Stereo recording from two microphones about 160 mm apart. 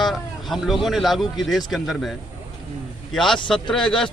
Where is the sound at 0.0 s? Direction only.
Centre (ahead or behind).